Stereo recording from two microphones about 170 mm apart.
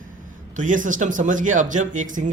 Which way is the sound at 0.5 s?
50° right (ahead or behind).